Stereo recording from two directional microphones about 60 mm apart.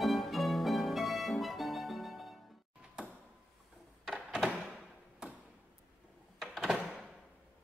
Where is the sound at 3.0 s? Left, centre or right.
Centre.